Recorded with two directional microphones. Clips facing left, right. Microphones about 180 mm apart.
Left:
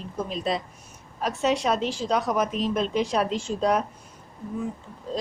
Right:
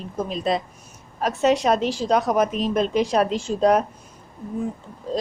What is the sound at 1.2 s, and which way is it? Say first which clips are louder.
A woman's voice: right 5 dB; 45° right (ahead or behind).